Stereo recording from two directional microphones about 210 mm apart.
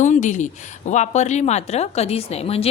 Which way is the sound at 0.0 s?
35° left (ahead or behind).